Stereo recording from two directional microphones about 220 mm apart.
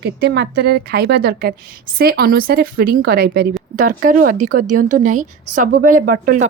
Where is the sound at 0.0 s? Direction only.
50° right (ahead or behind).